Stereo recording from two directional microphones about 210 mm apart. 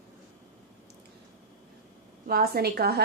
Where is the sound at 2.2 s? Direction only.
45° right (ahead or behind).